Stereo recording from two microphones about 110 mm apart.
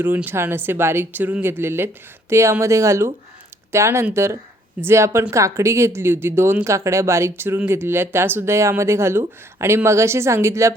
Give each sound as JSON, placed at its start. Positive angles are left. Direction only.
{"t": 0.3, "sound": "speech", "side_deg": -20}